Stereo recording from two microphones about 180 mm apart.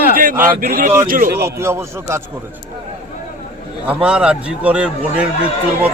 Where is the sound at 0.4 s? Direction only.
50° right (ahead or behind).